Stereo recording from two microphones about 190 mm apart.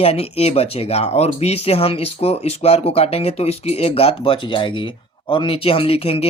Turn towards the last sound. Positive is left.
turn(degrees=30)  # may be behind; listen again after turning